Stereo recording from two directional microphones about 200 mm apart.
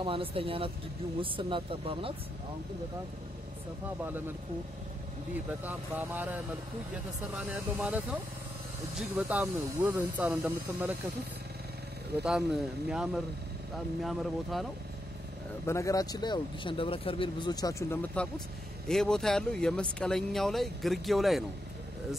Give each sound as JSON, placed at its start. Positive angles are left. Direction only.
{"t": 0.0, "sound": "speech", "side_deg": -25}
{"t": 5.6, "sound": "speech", "side_deg": -10}
{"t": 12.2, "sound": "speech", "side_deg": -5}
{"t": 15.6, "sound": "speech", "side_deg": 15}
{"t": 18.2, "sound": "speech", "side_deg": 5}